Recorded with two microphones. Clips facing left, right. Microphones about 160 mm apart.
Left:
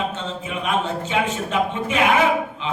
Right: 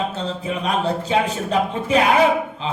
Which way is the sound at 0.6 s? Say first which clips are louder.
Right 1 dB; 35° right (ahead or behind).